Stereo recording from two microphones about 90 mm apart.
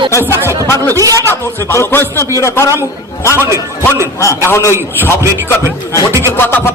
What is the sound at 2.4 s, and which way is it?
Speech, 35° left (ahead or behind).